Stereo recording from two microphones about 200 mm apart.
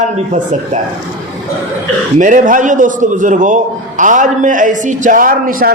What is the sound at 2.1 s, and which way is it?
A man's voice, 40° right (ahead or behind).